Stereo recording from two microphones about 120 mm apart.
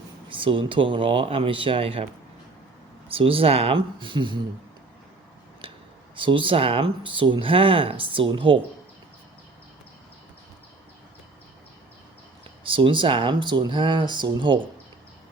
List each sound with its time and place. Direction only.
0.3 s speech: 45° right (ahead or behind)
3.1 s speech: 50° right (ahead or behind)
5.6 s a sound: 50° right (ahead or behind)
6.1 s speech: 45° right (ahead or behind)
12.6 s speech: 45° right (ahead or behind)